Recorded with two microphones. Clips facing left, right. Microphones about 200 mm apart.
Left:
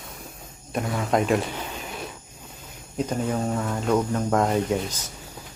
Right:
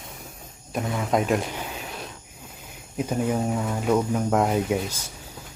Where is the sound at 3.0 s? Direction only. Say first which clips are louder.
Right 1 dB; 10° right (ahead or behind).